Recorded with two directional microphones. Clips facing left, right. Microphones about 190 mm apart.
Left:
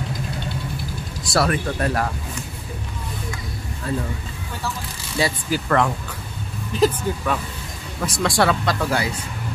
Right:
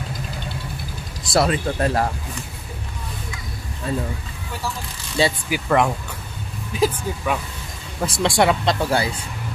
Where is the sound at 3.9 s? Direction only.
20° right (ahead or behind).